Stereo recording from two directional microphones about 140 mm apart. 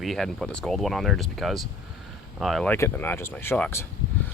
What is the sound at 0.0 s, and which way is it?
Speech, centre (ahead or behind).